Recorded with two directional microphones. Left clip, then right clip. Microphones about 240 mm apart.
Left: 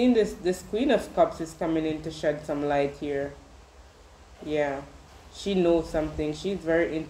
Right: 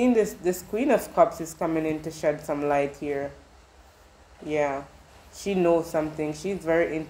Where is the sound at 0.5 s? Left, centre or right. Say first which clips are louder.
Right 2 dB; centre.